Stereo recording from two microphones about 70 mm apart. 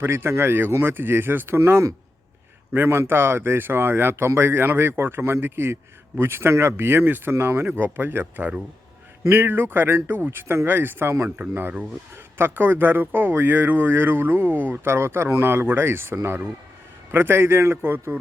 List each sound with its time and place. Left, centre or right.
0.0 s speech: right
1.5 s speech: right